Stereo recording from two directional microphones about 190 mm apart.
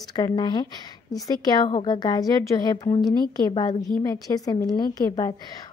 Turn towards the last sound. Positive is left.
turn(degrees=20)  # may be behind; listen again after turning